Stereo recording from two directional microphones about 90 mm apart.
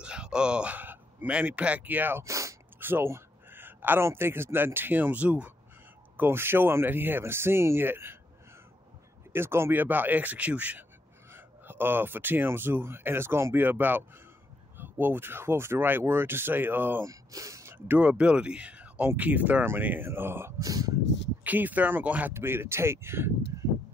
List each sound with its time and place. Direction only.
0.0 s speech: 10° right (ahead or behind)
2.2 s a sound: 35° right (ahead or behind)
2.8 s speech: 25° right (ahead or behind)
9.3 s speech: 25° right (ahead or behind)
17.0 s a sound: 40° right (ahead or behind)
17.8 s speech: 15° right (ahead or behind)
20.6 s speech: 40° right (ahead or behind)
21.5 s speech: 20° right (ahead or behind)